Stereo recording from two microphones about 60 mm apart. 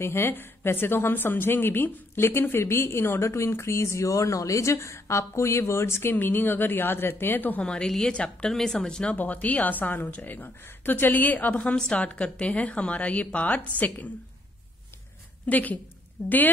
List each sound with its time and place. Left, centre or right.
0.0 s a woman's voice: left
6.1 s a woman's voice: left
7.6 s a woman's voice: centre
9.1 s a woman's voice: left
15.4 s a woman's voice: left
16.2 s a woman's voice: left